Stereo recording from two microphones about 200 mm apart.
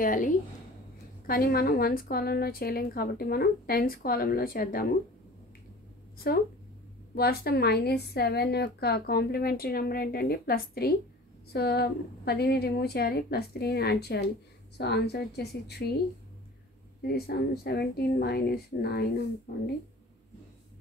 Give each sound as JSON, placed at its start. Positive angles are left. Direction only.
{"t": 0.0, "sound": "a woman's voice", "side_deg": 40}
{"t": 7.2, "sound": "a woman's voice", "side_deg": 50}
{"t": 17.0, "sound": "a woman's voice", "side_deg": 50}